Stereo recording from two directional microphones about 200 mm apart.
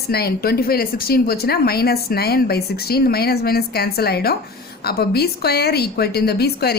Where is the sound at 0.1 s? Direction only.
50° left (ahead or behind).